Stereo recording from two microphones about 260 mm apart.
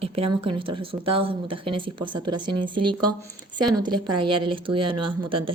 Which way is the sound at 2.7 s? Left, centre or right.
Right.